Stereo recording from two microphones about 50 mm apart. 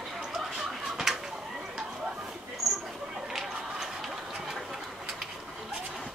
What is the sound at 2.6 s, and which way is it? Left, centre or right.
Mouse, right.